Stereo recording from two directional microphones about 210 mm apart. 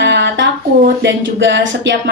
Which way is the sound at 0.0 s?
55° right (ahead or behind).